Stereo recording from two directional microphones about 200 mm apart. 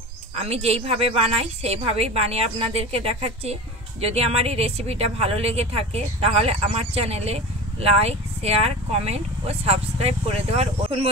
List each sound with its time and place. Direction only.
0.4 s a woman's voice: 30° right (ahead or behind)